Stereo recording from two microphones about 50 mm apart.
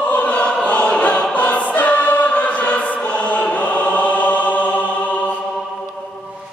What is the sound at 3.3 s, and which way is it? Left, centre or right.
Chant, left.